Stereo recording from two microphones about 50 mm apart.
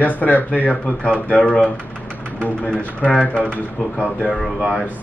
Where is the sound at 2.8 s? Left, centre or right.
Left.